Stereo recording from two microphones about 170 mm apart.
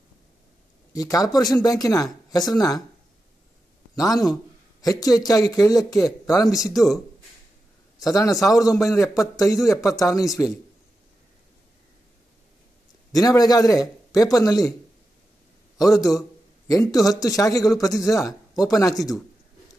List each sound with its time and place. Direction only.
0.9 s a man's voice: 20° left (ahead or behind)
3.9 s a man's voice: 20° left (ahead or behind)
8.0 s a man's voice: 20° left (ahead or behind)
13.1 s a man's voice: 20° left (ahead or behind)
15.9 s a man's voice: 20° left (ahead or behind)